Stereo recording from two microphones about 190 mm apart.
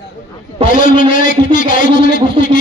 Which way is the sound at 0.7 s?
45° left (ahead or behind).